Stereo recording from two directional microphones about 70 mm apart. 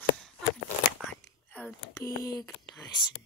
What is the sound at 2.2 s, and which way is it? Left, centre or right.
Speech, left.